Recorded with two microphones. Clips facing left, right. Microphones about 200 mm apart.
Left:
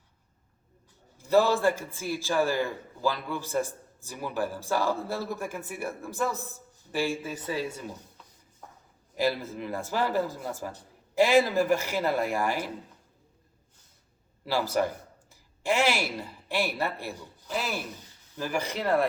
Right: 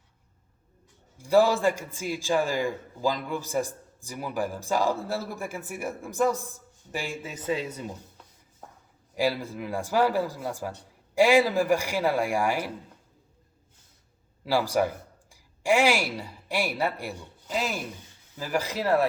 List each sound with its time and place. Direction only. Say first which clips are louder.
1.2 s a man's voice: right 1 dB; 10° right (ahead or behind)
9.1 s a man's voice: right 1 dB; 10° right (ahead or behind)
14.4 s a sound: right 2 dB; 10° right (ahead or behind)
16.6 s a man's voice: right 2 dB; 10° right (ahead or behind)